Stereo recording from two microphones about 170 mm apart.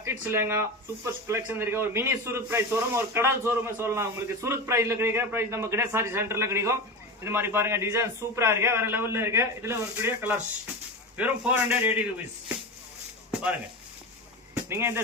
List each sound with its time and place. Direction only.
0.3 s speech: 15° right (ahead or behind)
14.5 s speech: 15° right (ahead or behind)